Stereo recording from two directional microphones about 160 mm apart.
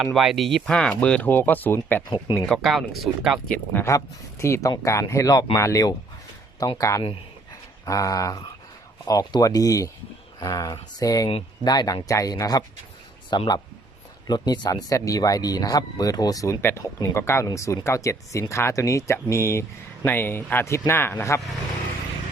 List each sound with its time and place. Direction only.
0.0 s speech: centre (ahead or behind)
2.0 s speech: 30° left (ahead or behind)
2.6 s speech: centre (ahead or behind)
3.5 s speech: 15° left (ahead or behind)